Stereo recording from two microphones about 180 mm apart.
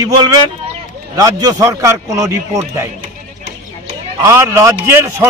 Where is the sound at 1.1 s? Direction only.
20° right (ahead or behind).